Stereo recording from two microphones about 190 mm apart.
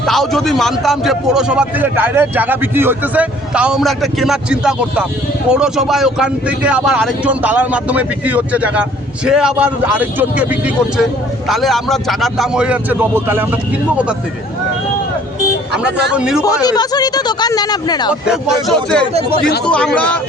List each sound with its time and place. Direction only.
0.0 s a man's voice: centre (ahead or behind)
16.1 s a man's voice: 5° right (ahead or behind)
16.4 s speech: 20° left (ahead or behind)
18.7 s a man's voice: 5° left (ahead or behind)